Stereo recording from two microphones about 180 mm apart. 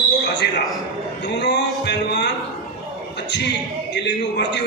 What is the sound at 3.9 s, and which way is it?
Speech, 70° left (ahead or behind).